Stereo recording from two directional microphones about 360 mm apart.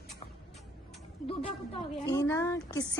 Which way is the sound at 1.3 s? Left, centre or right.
Centre.